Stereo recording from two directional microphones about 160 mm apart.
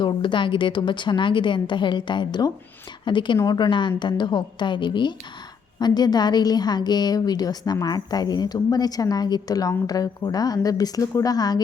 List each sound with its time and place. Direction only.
0.0 s a woman's voice: 30° left (ahead or behind)